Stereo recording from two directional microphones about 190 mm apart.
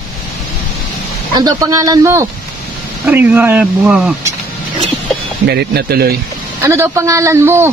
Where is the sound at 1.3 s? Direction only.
20° right (ahead or behind).